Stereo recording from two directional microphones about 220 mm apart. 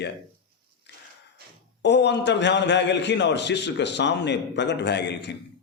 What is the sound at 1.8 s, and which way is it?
A man's voice, 50° left (ahead or behind).